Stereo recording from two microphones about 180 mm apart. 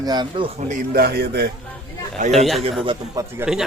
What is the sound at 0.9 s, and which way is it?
Speech, 60° right (ahead or behind).